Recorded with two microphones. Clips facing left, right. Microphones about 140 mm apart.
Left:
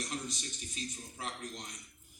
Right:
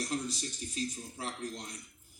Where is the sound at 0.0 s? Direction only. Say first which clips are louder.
Right 5 dB; 35° right (ahead or behind).